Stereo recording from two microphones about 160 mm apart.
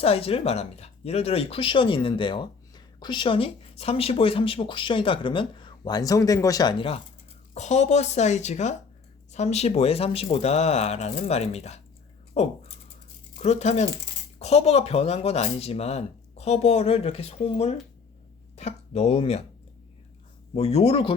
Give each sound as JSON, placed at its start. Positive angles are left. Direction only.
{"t": 0.0, "sound": "speech", "side_deg": 40}
{"t": 7.5, "sound": "speech", "side_deg": 45}
{"t": 20.5, "sound": "speech", "side_deg": 40}